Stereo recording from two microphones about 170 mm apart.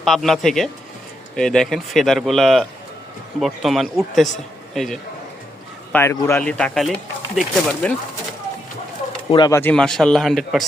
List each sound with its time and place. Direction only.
0.0 s speech: centre (ahead or behind)
5.9 s speech: 15° left (ahead or behind)
9.3 s speech: 25° left (ahead or behind)
9.6 s speech: 5° left (ahead or behind)